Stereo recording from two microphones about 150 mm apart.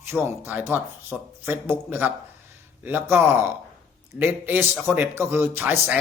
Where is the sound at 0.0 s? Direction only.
15° right (ahead or behind).